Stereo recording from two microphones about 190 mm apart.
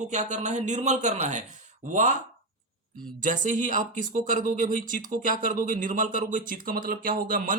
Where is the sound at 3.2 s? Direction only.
45° right (ahead or behind).